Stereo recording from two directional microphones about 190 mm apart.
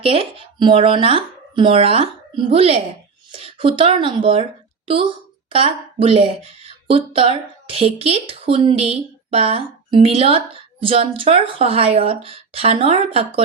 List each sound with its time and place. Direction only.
0.0 s a woman's voice: 30° right (ahead or behind)